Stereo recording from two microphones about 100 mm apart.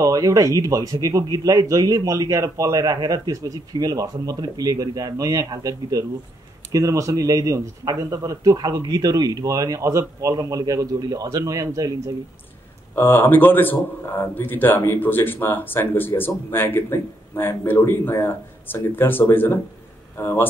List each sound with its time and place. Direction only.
0.0 s a man's voice: 35° right (ahead or behind)
12.9 s speech: 20° left (ahead or behind)